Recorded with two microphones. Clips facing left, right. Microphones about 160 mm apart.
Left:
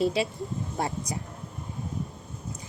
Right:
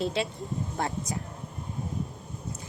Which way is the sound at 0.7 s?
20° left (ahead or behind).